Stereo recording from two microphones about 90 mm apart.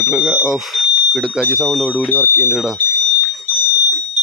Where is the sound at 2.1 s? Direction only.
30° left (ahead or behind).